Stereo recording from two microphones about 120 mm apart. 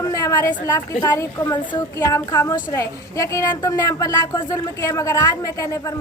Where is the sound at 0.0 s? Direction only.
25° left (ahead or behind).